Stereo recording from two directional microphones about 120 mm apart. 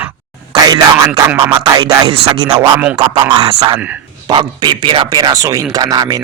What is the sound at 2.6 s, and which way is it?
Speech, 15° right (ahead or behind).